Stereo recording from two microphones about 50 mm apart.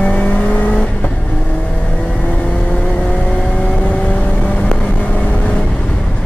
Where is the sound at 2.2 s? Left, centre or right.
Left.